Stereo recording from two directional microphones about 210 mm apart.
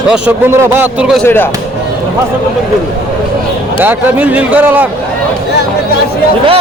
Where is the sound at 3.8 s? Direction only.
10° right (ahead or behind).